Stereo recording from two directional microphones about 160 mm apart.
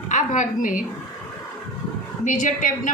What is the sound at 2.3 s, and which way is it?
Speech, 50° left (ahead or behind).